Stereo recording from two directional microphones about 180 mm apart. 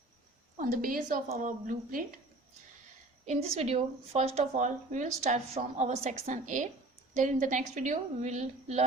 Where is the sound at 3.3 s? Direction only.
35° right (ahead or behind).